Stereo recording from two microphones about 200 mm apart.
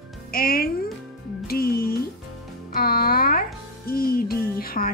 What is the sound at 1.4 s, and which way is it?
Music, 50° left (ahead or behind).